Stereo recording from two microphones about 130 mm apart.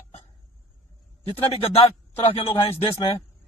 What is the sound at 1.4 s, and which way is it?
Speech, 50° left (ahead or behind).